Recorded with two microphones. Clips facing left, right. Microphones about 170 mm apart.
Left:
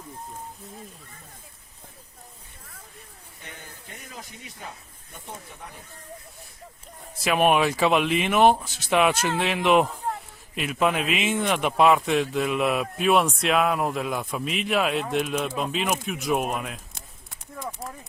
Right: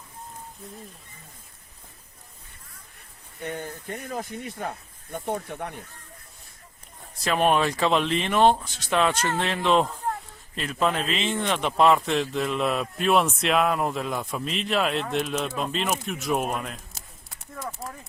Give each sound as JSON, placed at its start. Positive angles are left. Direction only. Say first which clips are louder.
{"t": 3.4, "sound": "speech", "louder": "right 13 dB", "side_deg": -55}
{"t": 7.3, "sound": "speech", "louder": "left 1 dB", "side_deg": 10}